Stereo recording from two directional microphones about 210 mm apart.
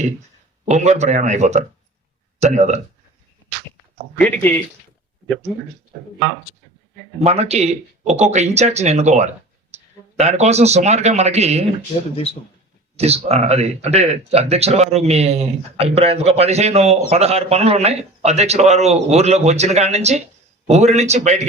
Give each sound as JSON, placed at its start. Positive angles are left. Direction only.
{"t": 0.7, "sound": "speech", "side_deg": -35}
{"t": 4.2, "sound": "speech", "side_deg": 10}
{"t": 7.2, "sound": "speech", "side_deg": -30}
{"t": 13.0, "sound": "speech", "side_deg": -30}